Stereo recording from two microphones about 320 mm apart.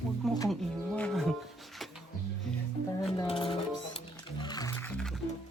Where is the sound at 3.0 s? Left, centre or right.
Centre.